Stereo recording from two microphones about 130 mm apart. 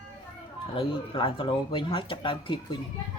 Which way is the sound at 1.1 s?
40° left (ahead or behind).